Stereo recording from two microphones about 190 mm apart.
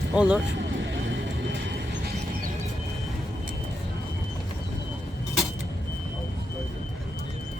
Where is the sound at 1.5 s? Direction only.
70° right (ahead or behind).